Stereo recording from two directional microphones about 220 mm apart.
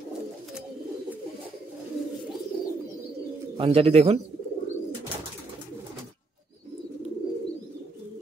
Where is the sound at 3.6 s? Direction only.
25° right (ahead or behind).